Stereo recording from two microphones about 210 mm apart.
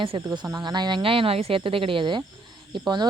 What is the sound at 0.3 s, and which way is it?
Speech, 20° right (ahead or behind).